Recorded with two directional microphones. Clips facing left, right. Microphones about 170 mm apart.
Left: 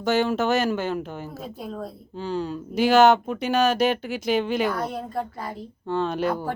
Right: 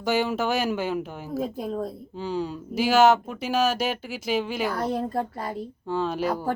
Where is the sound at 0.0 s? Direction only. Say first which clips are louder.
Left 2 dB; 10° right (ahead or behind).